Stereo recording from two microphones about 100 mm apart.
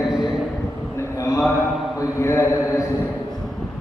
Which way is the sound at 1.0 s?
30° left (ahead or behind).